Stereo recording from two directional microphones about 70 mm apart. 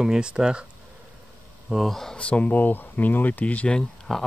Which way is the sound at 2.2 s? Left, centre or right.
Centre.